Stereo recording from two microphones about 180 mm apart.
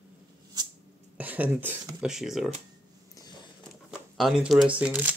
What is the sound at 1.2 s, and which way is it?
Speech, 10° right (ahead or behind).